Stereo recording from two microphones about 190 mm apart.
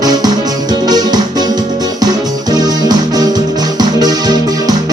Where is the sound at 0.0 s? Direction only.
20° right (ahead or behind).